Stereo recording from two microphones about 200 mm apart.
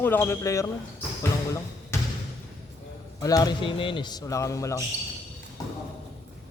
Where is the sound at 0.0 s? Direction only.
10° left (ahead or behind).